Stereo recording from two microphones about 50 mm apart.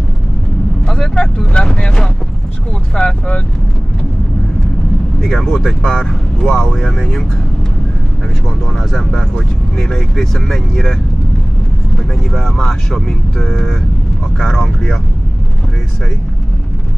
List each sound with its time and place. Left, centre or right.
0.8 s speech: centre
5.2 s speech: centre
8.7 s speech: centre
12.2 s speech: centre